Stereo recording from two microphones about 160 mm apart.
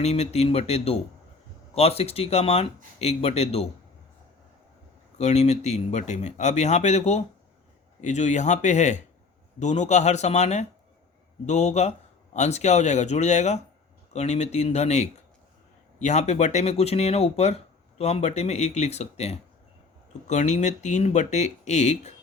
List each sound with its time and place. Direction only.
0.0 s speech: 45° left (ahead or behind)
5.1 s speech: 45° left (ahead or behind)